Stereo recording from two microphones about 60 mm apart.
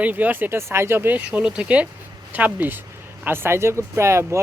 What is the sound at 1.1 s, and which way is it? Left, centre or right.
Speech, right.